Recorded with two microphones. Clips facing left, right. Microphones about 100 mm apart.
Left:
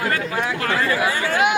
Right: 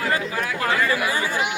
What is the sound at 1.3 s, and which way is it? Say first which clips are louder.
Speech: left 6 dB; 55° left (ahead or behind).